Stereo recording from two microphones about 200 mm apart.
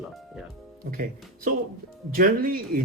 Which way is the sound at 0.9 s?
45° right (ahead or behind).